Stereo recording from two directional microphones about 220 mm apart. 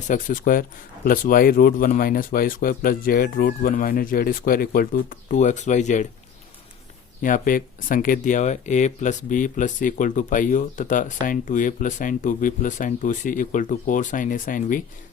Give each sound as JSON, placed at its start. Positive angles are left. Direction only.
{"t": 0.1, "sound": "speech", "side_deg": 40}
{"t": 7.2, "sound": "speech", "side_deg": 40}